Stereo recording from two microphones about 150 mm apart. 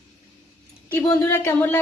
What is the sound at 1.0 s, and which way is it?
Speech, 20° left (ahead or behind).